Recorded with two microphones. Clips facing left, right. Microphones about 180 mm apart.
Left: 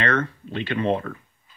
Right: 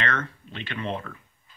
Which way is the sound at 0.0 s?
30° left (ahead or behind).